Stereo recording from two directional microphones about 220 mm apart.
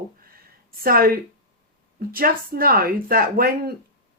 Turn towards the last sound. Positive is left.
turn(degrees=-45)  # may be behind; listen again after turning